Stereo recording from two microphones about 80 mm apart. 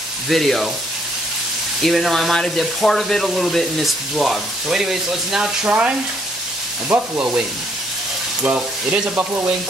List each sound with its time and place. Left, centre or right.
0.3 s speech: centre
1.8 s speech: centre
5.7 s frying: centre
8.5 s frying: centre